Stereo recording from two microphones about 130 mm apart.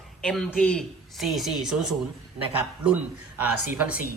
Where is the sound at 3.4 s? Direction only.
15° right (ahead or behind).